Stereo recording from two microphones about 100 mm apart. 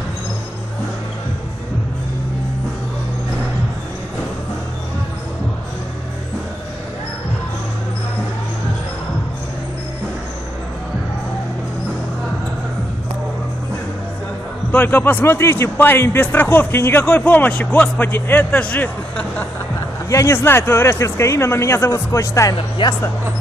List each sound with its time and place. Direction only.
14.7 s a man's voice: 20° left (ahead or behind)
20.1 s a man's voice: 30° left (ahead or behind)
22.6 s speech: 55° left (ahead or behind)